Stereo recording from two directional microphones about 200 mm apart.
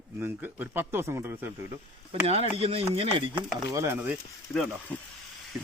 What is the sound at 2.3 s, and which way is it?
Speech, 30° right (ahead or behind).